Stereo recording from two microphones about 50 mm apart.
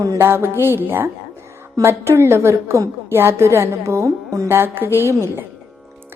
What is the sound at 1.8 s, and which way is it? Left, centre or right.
A woman's voice, right.